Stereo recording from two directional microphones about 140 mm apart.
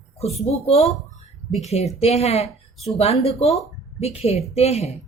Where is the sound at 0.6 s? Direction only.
45° left (ahead or behind).